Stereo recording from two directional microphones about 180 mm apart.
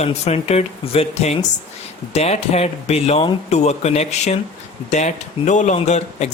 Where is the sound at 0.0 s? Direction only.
35° left (ahead or behind).